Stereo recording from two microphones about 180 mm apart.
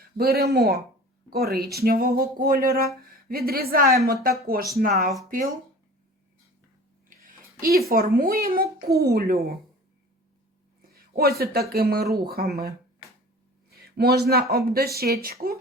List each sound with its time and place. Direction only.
0.2 s speech: 60° right (ahead or behind)
7.1 s speech: 50° right (ahead or behind)
11.1 s speech: 60° right (ahead or behind)
13.7 s a sound: 60° right (ahead or behind)
14.5 s speech: 60° right (ahead or behind)